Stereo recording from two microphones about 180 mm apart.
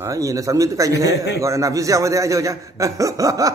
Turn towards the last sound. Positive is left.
turn(degrees=-20)  # may be behind; listen again after turning